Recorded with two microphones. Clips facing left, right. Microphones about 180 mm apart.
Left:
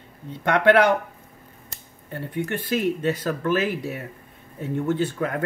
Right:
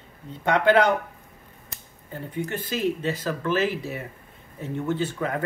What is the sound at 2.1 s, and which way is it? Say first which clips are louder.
Speech: left 2 dB; 65° left (ahead or behind).